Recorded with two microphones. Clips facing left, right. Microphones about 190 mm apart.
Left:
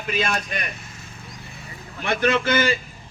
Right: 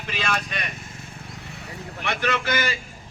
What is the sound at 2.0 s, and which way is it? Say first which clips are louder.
Speech: left 5 dB; 45° left (ahead or behind).